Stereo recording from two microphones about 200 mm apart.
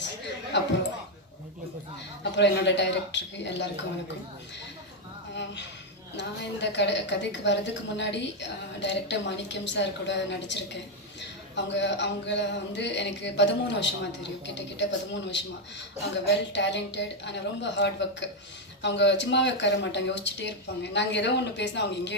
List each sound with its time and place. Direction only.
0.5 s a sound: 60° left (ahead or behind)
2.3 s a woman's voice: 60° left (ahead or behind)
5.3 s a woman's voice: 60° left (ahead or behind)